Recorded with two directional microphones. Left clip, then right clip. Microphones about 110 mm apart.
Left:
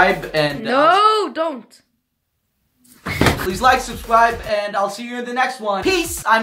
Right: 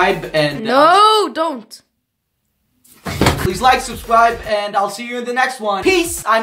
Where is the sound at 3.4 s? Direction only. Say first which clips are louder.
Right 3 dB; centre (ahead or behind).